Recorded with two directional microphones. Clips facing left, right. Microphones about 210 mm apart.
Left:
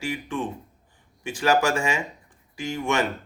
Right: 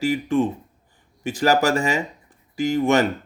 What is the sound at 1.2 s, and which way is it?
Speech, 40° right (ahead or behind).